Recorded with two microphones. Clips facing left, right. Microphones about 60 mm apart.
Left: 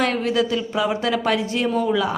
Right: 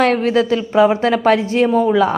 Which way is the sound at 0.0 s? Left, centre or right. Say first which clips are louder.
Right 6 dB; right.